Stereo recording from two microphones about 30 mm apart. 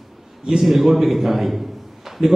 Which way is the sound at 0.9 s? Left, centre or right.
Centre.